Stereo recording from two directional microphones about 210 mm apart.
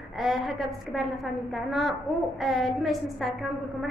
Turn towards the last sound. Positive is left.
turn(degrees=0)  # may be behind; listen again after turning